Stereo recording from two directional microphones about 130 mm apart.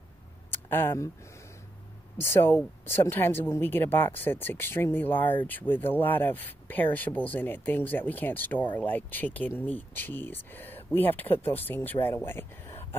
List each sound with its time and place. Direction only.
0.5 s speech: 15° left (ahead or behind)
2.1 s speech: 20° left (ahead or behind)